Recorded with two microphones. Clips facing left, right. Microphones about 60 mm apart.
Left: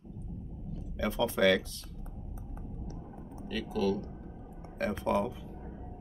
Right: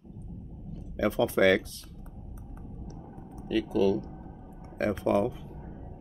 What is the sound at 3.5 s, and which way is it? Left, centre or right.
Speech, centre.